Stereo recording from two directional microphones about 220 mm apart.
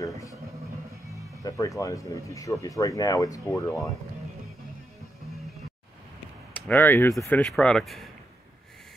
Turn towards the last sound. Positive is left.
turn(degrees=5)  # may be behind; listen again after turning